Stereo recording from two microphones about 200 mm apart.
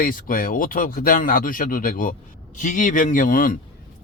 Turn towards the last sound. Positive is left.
turn(degrees=45)  # may be behind; listen again after turning